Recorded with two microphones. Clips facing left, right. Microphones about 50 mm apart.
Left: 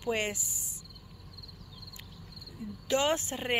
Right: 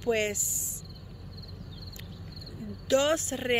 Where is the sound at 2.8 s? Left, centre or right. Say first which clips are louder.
Right 3 dB; left.